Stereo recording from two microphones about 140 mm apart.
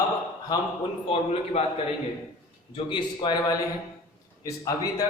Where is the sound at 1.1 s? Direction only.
45° left (ahead or behind).